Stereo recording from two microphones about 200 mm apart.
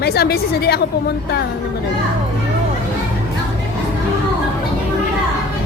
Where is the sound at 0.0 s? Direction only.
50° left (ahead or behind).